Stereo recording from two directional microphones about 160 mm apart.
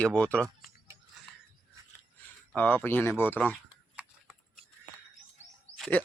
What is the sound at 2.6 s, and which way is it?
Speech, 10° left (ahead or behind).